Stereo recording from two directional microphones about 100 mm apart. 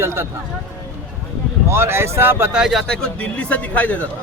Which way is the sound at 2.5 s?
5° right (ahead or behind).